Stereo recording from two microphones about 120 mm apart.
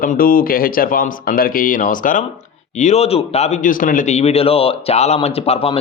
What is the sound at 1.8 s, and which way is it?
Speech, 90° left.